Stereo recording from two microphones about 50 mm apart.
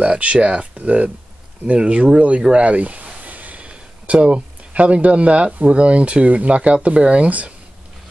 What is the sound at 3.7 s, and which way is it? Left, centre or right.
Speech, right.